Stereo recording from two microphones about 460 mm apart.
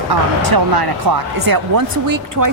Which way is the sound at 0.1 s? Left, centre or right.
Right.